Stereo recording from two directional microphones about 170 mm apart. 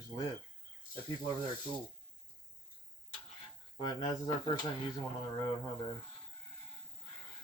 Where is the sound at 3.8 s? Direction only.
30° left (ahead or behind).